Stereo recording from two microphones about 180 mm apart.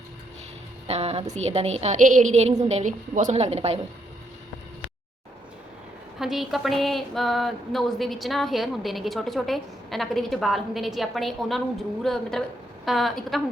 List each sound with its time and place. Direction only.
0.9 s a woman's voice: 35° right (ahead or behind)
6.1 s a woman's voice: centre (ahead or behind)